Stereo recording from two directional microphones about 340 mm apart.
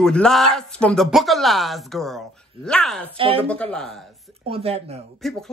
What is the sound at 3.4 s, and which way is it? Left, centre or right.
Speech, centre.